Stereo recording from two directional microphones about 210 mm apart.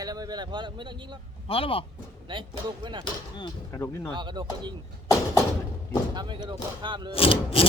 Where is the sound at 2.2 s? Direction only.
20° right (ahead or behind).